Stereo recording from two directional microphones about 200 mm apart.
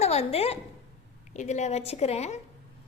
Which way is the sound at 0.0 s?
30° left (ahead or behind).